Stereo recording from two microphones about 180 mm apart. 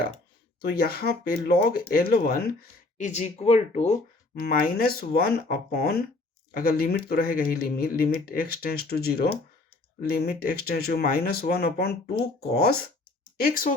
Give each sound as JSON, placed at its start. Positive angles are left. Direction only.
{"t": 0.7, "sound": "speech", "side_deg": 55}
{"t": 3.1, "sound": "speech", "side_deg": 40}
{"t": 4.4, "sound": "speech", "side_deg": 55}
{"t": 13.4, "sound": "speech", "side_deg": 50}